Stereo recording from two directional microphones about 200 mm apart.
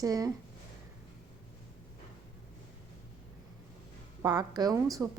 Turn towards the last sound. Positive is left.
turn(degrees=-20)  # may be behind; listen again after turning